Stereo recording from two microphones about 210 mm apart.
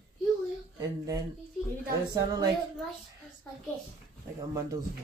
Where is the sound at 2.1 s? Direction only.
20° right (ahead or behind).